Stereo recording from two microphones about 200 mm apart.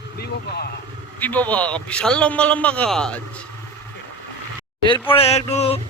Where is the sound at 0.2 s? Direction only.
55° left (ahead or behind).